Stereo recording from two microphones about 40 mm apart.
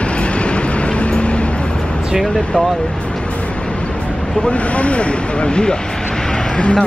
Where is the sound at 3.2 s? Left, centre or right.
Left.